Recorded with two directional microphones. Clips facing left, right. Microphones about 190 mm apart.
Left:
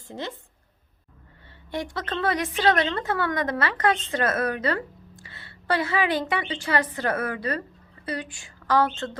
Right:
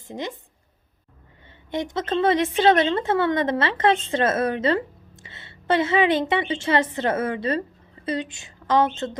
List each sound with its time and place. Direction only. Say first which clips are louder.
0.1 s speech: right 3 dB; 15° right (ahead or behind)
1.7 s a woman's voice: right 5 dB; 20° right (ahead or behind)